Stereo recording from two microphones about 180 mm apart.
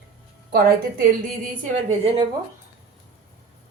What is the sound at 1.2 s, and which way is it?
Speech, 45° right (ahead or behind).